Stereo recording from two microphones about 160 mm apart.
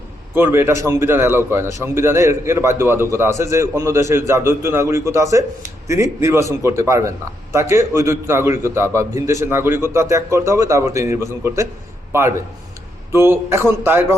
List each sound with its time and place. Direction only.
0.3 s a man's voice: 15° right (ahead or behind)
13.1 s a man's voice: 15° right (ahead or behind)